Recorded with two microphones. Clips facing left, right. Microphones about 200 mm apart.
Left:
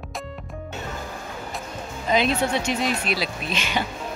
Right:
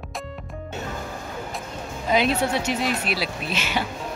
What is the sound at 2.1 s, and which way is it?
Speech, 5° right (ahead or behind).